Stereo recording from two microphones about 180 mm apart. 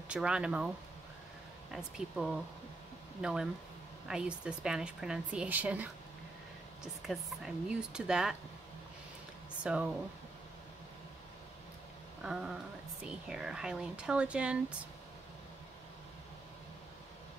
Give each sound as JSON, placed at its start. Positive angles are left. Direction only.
{"t": 0.1, "sound": "speech", "side_deg": -5}
{"t": 1.7, "sound": "speech", "side_deg": -5}
{"t": 9.6, "sound": "speech", "side_deg": -5}
{"t": 12.2, "sound": "speech", "side_deg": -5}